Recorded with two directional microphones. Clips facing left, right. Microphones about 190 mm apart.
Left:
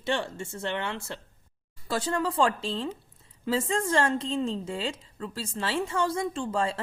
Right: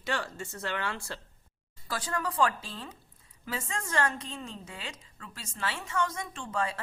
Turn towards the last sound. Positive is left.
turn(degrees=30)  # may be behind; listen again after turning